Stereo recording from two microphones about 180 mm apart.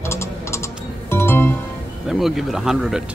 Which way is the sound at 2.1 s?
Centre (ahead or behind).